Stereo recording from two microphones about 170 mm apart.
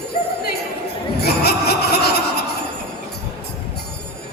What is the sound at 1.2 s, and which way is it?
Snicker, 70° left (ahead or behind).